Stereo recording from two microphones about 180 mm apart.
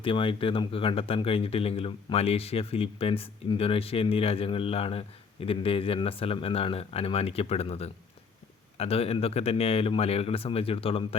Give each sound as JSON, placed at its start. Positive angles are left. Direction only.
{"t": 0.0, "sound": "speech", "side_deg": 30}